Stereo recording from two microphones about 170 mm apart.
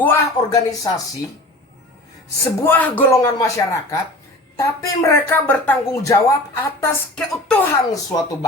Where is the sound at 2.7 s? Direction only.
10° left (ahead or behind).